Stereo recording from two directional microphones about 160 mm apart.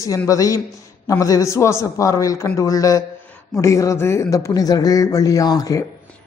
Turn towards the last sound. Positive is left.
turn(degrees=25)  # may be behind; listen again after turning